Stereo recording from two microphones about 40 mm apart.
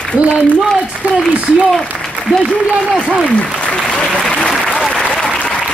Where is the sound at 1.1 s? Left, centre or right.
Right.